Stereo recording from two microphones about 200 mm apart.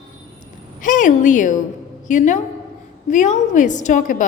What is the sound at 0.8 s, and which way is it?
A woman's voice, 40° left (ahead or behind).